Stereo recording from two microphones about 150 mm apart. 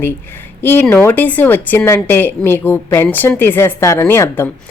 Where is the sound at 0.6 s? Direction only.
15° left (ahead or behind).